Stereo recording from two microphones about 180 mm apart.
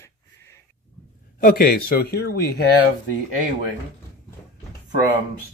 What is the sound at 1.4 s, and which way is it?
A man's voice, 55° left (ahead or behind).